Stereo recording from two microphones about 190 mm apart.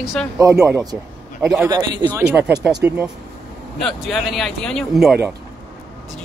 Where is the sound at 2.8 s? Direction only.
10° right (ahead or behind).